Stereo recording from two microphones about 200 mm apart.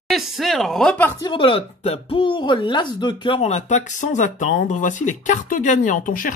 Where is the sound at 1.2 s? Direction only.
25° left (ahead or behind).